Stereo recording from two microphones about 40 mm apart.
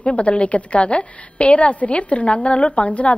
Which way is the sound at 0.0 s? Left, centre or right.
Left.